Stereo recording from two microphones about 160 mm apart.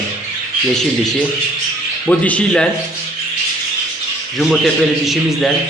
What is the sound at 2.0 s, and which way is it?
Speech, 10° left (ahead or behind).